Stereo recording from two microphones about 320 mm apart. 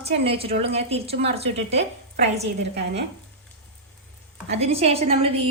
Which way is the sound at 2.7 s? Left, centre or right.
Right.